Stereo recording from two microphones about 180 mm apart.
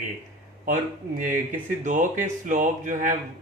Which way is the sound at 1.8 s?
45° right (ahead or behind).